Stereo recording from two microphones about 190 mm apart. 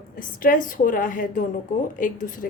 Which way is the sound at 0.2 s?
45° left (ahead or behind).